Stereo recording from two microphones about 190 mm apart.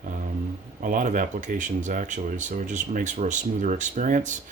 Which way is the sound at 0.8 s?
45° right (ahead or behind).